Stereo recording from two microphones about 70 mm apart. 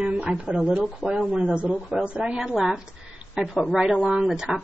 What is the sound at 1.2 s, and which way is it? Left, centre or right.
Speech, right.